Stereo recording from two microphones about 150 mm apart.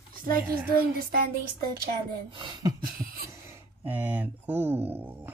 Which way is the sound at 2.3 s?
30° right (ahead or behind).